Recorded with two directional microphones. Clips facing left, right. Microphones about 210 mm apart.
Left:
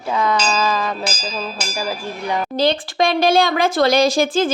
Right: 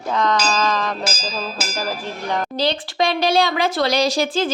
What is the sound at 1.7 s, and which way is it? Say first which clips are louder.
Speech: left 2 dB; 10° left (ahead or behind).